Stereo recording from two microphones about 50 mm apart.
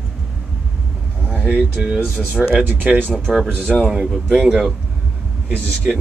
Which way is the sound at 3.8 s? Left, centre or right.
Centre.